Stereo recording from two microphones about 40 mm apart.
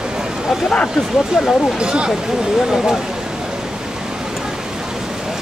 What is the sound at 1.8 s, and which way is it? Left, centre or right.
Speech, right.